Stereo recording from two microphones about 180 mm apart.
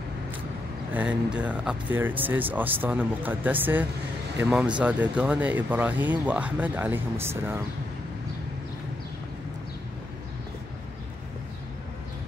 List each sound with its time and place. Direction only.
0.9 s speech: 5° right (ahead or behind)